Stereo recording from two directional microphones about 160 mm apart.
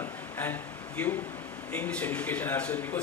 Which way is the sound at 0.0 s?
10° left (ahead or behind).